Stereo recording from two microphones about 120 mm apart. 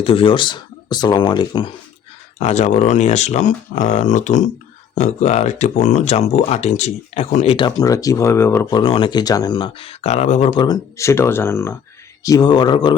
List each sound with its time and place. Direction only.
0.0 s speech: 50° left (ahead or behind)
2.4 s speech: 70° left (ahead or behind)
7.5 s speech: 40° left (ahead or behind)
7.9 s speech: 30° left (ahead or behind)
8.7 s speech: 45° left (ahead or behind); by 10.5 s 70° left (ahead or behind)
10.9 s speech: 25° left (ahead or behind)
12.2 s speech: 30° left (ahead or behind)